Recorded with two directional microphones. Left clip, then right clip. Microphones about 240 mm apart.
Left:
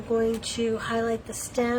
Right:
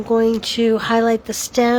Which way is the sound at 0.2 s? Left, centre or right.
Right.